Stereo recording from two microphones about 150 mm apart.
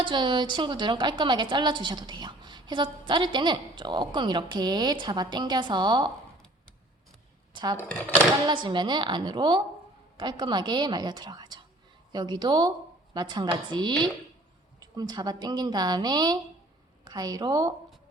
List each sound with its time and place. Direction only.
0.0 s a woman's voice: 30° right (ahead or behind)
7.5 s a woman's voice: 30° right (ahead or behind)